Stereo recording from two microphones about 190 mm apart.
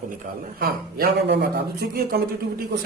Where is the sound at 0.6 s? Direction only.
55° right (ahead or behind).